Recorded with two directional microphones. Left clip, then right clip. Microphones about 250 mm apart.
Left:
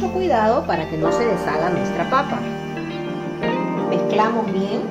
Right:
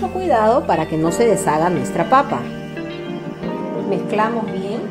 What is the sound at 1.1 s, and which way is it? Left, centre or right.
Speech, right.